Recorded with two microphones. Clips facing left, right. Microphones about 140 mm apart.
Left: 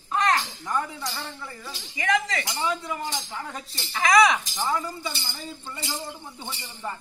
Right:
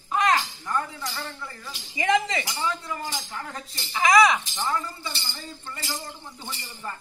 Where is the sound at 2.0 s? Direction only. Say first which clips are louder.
Right 2 dB; 25° right (ahead or behind).